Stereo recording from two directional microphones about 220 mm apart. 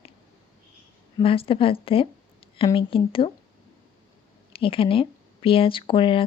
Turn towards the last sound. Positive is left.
turn(degrees=25)  # may be behind; listen again after turning